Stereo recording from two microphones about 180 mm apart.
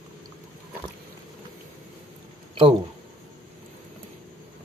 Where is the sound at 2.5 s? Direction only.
30° right (ahead or behind).